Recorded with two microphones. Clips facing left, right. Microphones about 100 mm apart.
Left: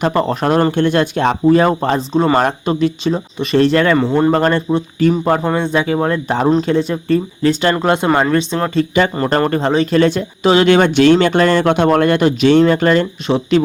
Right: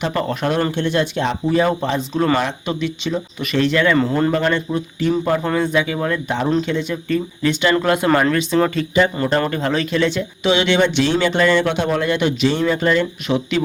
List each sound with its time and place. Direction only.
0.0 s speech: 35° left (ahead or behind)
0.8 s speech: 55° left (ahead or behind)
2.1 s speech: 25° left (ahead or behind)
2.4 s speech: 40° left (ahead or behind)
3.9 s speech: 20° left (ahead or behind)
4.3 s speech: 40° left (ahead or behind)
5.4 s speech: 25° left (ahead or behind)
7.8 s speech: 25° left (ahead or behind)
9.1 s speech: 40° left (ahead or behind)
9.9 s speech: 45° left (ahead or behind)
13.2 s speech: 30° left (ahead or behind)